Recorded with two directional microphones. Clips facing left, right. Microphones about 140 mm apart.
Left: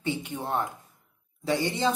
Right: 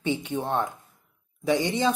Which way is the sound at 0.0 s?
20° right (ahead or behind).